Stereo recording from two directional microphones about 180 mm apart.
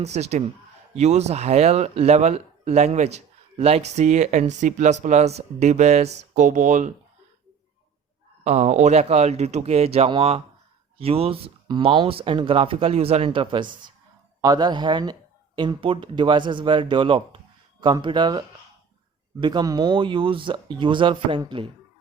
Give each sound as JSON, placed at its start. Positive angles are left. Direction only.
{"t": 0.0, "sound": "speech", "side_deg": -35}
{"t": 8.4, "sound": "speech", "side_deg": -40}